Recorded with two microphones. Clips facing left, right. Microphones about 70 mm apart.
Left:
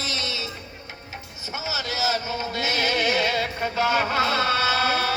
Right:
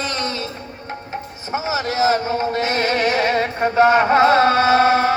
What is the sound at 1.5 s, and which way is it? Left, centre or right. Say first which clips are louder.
Music: right 9 dB; right.